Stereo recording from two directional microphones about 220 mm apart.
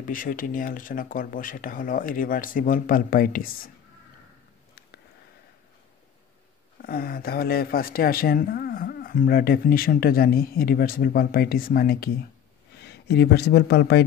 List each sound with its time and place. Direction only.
0.0 s speech: 40° left (ahead or behind)
6.8 s speech: 40° left (ahead or behind)